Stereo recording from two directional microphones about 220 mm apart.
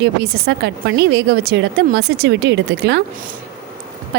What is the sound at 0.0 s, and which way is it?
A woman's voice, 50° right (ahead or behind).